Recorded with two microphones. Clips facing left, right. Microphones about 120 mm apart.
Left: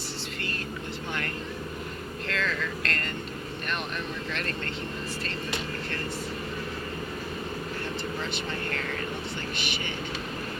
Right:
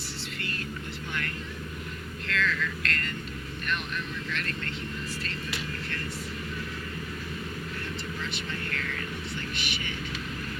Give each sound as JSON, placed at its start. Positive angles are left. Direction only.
{"t": 2.2, "sound": "vehicle", "side_deg": 35}
{"t": 8.7, "sound": "vehicle", "side_deg": 35}
{"t": 9.6, "sound": "a sound", "side_deg": 35}